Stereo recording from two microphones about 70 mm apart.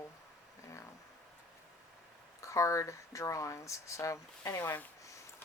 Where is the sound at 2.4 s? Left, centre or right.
Left.